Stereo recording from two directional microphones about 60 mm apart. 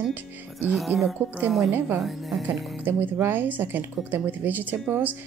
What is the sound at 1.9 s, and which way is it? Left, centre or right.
Speech, centre.